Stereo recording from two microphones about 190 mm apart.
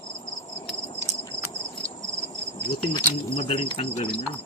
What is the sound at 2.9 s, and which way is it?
Speech, 30° left (ahead or behind).